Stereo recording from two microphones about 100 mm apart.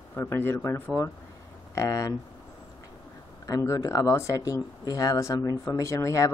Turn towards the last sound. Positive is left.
turn(degrees=30)  # may be behind; listen again after turning